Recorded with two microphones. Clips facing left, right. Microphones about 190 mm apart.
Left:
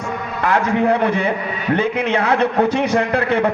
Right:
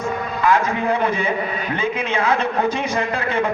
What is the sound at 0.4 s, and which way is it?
A man's voice, 65° left (ahead or behind).